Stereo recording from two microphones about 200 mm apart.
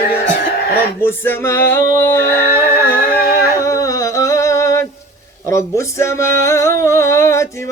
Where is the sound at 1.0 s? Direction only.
10° left (ahead or behind).